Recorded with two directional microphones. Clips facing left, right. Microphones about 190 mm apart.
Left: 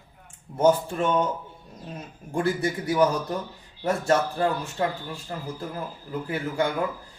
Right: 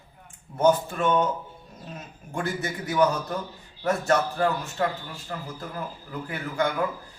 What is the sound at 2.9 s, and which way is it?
Speech, 10° left (ahead or behind).